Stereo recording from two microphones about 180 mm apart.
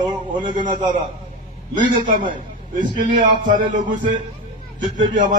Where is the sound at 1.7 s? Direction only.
45° right (ahead or behind).